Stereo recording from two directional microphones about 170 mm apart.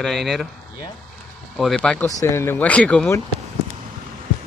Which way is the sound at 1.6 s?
5° left (ahead or behind).